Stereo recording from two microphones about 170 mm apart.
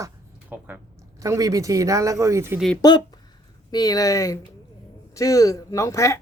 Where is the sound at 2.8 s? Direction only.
25° left (ahead or behind).